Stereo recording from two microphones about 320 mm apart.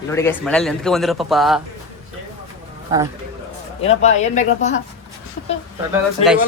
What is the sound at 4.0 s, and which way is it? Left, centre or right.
Speech, left.